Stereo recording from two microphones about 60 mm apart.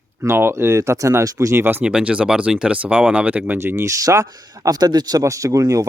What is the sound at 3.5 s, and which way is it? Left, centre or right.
Speech, right.